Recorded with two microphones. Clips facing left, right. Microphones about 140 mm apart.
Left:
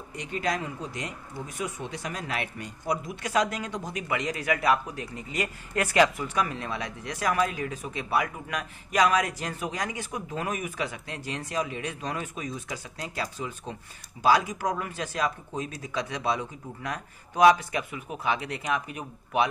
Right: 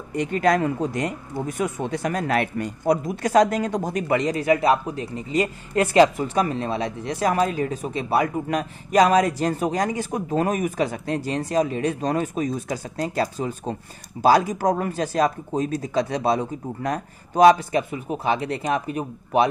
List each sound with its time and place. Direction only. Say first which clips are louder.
0.1 s speech: right 10 dB; 55° right (ahead or behind); by 19.5 s 35° right (ahead or behind)